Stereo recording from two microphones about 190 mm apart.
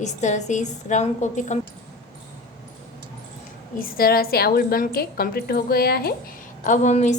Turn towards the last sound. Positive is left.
turn(degrees=40)  # may be behind; listen again after turning